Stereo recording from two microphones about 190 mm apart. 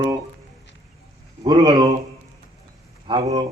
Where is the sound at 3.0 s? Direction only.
20° right (ahead or behind).